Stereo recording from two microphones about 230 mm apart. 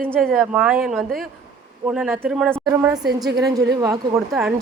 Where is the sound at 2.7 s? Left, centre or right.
Centre.